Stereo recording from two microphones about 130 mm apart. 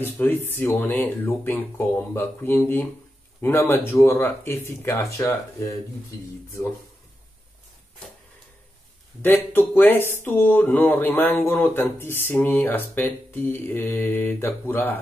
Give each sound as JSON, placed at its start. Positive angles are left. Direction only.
{"t": 0.0, "sound": "speech", "side_deg": 15}
{"t": 9.2, "sound": "speech", "side_deg": 15}